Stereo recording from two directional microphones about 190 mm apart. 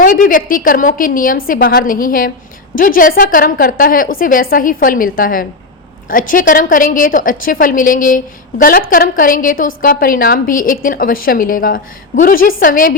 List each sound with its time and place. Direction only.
0.0 s a woman's voice: 45° left (ahead or behind)